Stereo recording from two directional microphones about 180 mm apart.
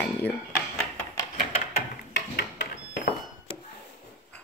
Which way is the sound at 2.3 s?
60° left (ahead or behind).